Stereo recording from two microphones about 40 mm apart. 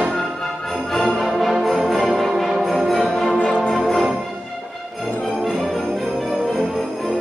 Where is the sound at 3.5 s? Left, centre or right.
Centre.